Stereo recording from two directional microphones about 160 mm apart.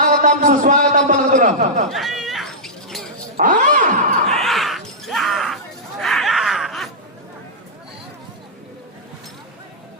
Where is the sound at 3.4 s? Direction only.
55° right (ahead or behind).